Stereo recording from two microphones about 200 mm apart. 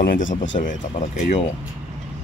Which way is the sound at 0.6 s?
40° left (ahead or behind).